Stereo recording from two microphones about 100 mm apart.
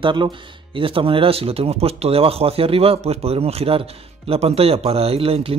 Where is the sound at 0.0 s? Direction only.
50° right (ahead or behind).